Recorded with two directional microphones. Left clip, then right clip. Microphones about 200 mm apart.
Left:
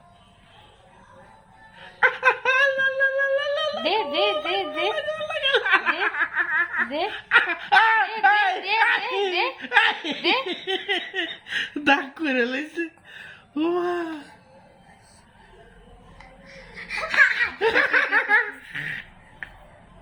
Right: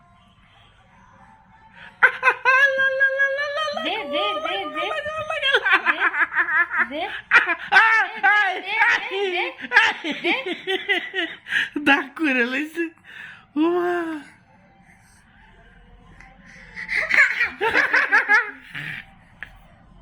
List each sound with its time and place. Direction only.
1.8 s a sound: 45° right (ahead or behind)
3.8 s a woman's voice: 15° left (ahead or behind)
4.9 s snicker: 45° right (ahead or behind)
7.1 s laughter: 35° right (ahead or behind)
8.2 s a sound: 40° right (ahead or behind)
8.8 s laughter: 40° right (ahead or behind)
10.4 s speech: 45° right (ahead or behind)
16.7 s laughter: centre (ahead or behind)
17.6 s snicker: 40° right (ahead or behind)